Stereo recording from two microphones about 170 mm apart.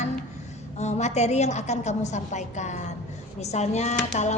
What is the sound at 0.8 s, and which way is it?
A woman's voice, 40° left (ahead or behind).